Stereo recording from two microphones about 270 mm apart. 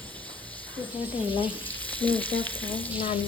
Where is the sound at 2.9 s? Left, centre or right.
Centre.